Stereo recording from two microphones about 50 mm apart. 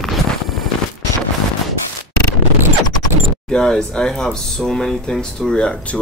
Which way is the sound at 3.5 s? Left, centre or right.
Centre.